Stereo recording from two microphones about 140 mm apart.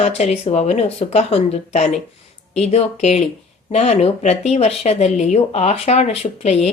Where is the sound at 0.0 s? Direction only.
50° left (ahead or behind).